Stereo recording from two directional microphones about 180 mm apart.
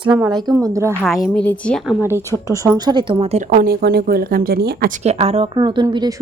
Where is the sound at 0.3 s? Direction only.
20° right (ahead or behind).